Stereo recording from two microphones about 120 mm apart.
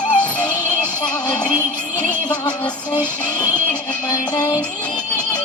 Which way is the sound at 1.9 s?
10° left (ahead or behind).